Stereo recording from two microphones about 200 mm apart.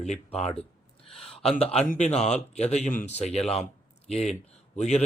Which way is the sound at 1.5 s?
30° left (ahead or behind).